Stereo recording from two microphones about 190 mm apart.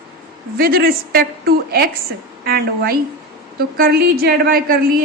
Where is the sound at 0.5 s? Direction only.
50° right (ahead or behind).